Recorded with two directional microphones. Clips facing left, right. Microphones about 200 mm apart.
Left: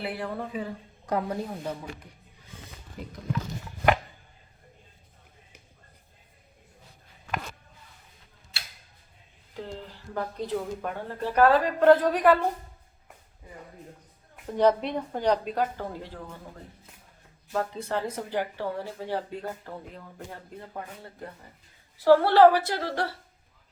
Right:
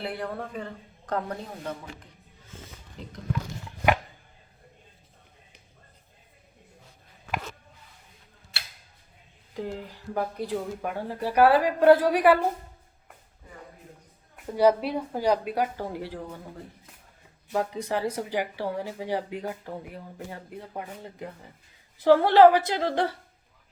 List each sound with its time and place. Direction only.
0.0 s speech: centre (ahead or behind)
9.6 s speech: 15° right (ahead or behind)
14.4 s speech: 10° right (ahead or behind)
17.5 s a woman's voice: 15° right (ahead or behind)